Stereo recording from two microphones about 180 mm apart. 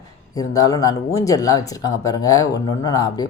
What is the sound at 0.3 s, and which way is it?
Speech, 20° left (ahead or behind).